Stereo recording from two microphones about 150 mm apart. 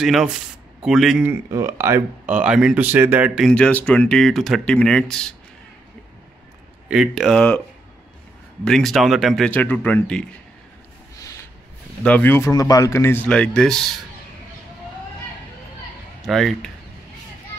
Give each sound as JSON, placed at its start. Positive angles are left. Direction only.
{"t": 0.0, "sound": "speech", "side_deg": 0}
{"t": 1.3, "sound": "speech", "side_deg": -20}
{"t": 3.4, "sound": "speech", "side_deg": 5}
{"t": 6.9, "sound": "speech", "side_deg": 0}
{"t": 8.6, "sound": "speech", "side_deg": 0}
{"t": 9.5, "sound": "speech", "side_deg": 10}
{"t": 11.1, "sound": "a sound", "side_deg": 20}
{"t": 12.0, "sound": "speech", "side_deg": 10}
{"t": 16.3, "sound": "speech", "side_deg": 0}